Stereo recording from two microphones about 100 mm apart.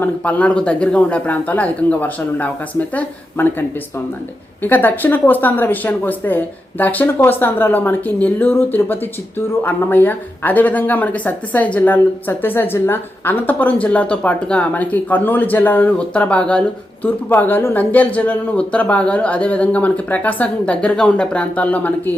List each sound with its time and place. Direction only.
0.0 s speech: 15° left (ahead or behind)
4.6 s a woman's voice: 20° left (ahead or behind)